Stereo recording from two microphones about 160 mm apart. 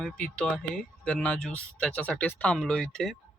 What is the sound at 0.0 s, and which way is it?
Speech, 5° left (ahead or behind).